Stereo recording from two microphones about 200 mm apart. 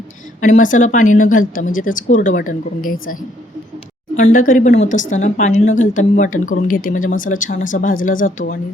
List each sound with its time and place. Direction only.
0.4 s a woman's voice: 40° left (ahead or behind)